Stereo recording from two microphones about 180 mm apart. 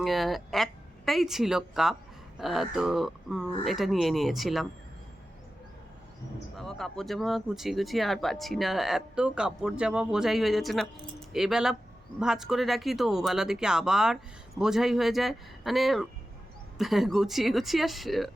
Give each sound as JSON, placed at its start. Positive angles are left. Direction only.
{"t": 0.0, "sound": "speech", "side_deg": 0}
{"t": 6.6, "sound": "speech", "side_deg": 0}